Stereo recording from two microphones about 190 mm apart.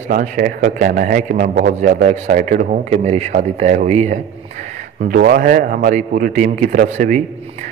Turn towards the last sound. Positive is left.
turn(degrees=-40)  # may be behind; listen again after turning